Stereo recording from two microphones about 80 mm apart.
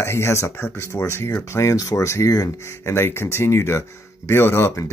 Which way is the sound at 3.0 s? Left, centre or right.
Left.